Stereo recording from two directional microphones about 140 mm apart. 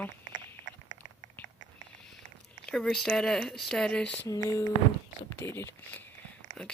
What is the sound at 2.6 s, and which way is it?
Speech, 5° left (ahead or behind).